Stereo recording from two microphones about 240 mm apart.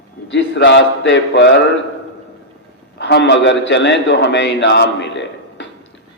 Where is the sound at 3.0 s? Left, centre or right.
Left.